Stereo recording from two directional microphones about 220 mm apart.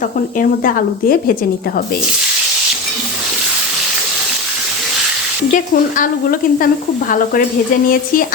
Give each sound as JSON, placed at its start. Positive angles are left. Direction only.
{"t": 0.3, "sound": "speech", "side_deg": 40}
{"t": 5.5, "sound": "speech", "side_deg": 35}